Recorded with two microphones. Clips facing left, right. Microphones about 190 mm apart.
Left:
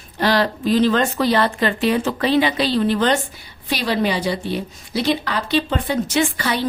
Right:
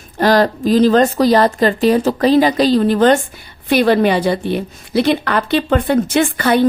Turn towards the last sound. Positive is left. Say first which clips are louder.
# right 7 dB
turn(degrees=-55)  # may be behind; listen again after turning